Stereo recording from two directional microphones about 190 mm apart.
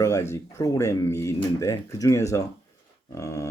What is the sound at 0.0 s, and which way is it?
Speech, 15° left (ahead or behind).